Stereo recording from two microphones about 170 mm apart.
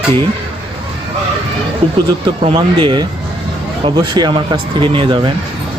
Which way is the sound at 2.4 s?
30° right (ahead or behind).